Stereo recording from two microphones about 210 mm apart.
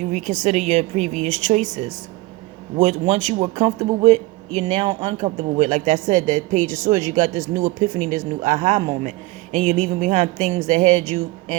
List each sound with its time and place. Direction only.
0.3 s a man's voice: 35° right (ahead or behind)